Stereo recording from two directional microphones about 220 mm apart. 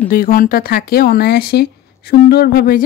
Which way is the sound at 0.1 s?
40° left (ahead or behind).